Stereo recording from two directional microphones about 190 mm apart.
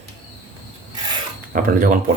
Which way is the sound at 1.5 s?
45° right (ahead or behind).